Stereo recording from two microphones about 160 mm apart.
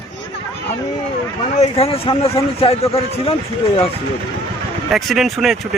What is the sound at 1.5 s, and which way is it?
A man's voice, 40° left (ahead or behind).